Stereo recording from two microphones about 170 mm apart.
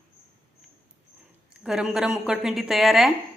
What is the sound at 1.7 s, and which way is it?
A woman's voice, 5° right (ahead or behind).